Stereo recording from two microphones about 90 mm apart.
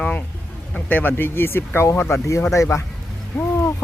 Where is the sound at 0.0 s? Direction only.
15° left (ahead or behind).